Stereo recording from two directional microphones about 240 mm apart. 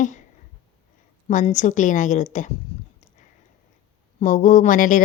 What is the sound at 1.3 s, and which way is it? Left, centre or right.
Speech, left.